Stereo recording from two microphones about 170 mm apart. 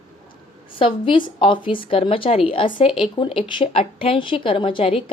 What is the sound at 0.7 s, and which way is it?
A woman's voice, 30° left (ahead or behind).